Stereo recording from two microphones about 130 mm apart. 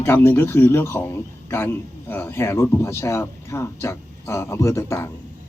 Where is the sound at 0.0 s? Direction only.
20° left (ahead or behind).